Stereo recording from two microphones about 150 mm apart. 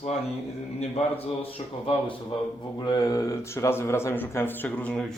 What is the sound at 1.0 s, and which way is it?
Speech, 45° left (ahead or behind).